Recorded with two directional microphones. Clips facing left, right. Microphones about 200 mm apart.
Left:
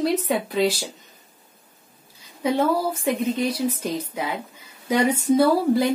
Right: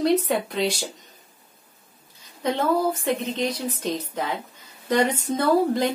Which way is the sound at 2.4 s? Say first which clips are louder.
Left 1 dB; 10° left (ahead or behind).